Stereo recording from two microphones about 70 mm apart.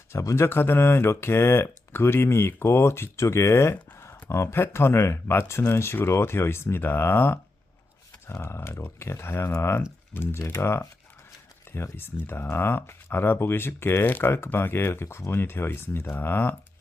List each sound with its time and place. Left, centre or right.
0.1 s speech: left
0.4 s speech: left
11.9 s speech: left